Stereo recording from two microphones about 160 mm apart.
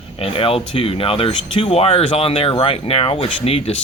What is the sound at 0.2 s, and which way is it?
Speech, 35° left (ahead or behind).